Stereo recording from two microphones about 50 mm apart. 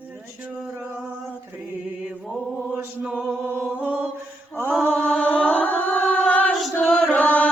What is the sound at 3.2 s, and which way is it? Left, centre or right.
Chant, right.